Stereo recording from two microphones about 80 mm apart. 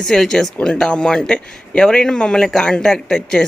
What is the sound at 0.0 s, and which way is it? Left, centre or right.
Speech, centre.